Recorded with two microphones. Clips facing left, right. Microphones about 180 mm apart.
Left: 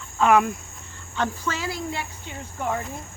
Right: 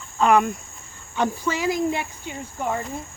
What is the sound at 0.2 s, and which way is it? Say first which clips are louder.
Speech: right 1 dB; centre (ahead or behind).